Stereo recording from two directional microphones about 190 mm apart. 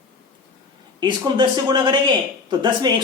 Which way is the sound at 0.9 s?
25° right (ahead or behind).